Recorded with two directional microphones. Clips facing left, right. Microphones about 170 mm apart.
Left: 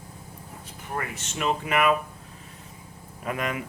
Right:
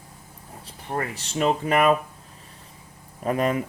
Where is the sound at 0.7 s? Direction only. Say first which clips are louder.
Right 4 dB; 35° right (ahead or behind).